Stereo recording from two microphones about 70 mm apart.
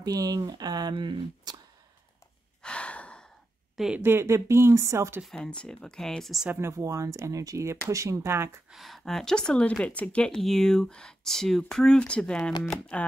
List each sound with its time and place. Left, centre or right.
0.0 s speech: right
2.6 s gasp: centre
4.0 s speech: right
5.3 s speech: centre
6.8 s speech: right
8.6 s speech: centre